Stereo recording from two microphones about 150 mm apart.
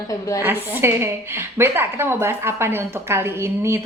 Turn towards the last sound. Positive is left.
turn(degrees=-15)  # may be behind; listen again after turning